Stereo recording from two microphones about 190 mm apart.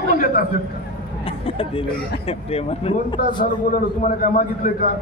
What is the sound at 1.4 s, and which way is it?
Speech, 30° left (ahead or behind).